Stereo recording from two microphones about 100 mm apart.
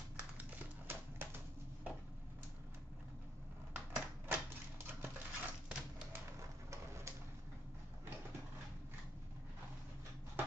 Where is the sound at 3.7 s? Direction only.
20° right (ahead or behind).